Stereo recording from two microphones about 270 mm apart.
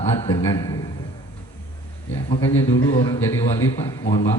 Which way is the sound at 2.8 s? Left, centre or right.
Left.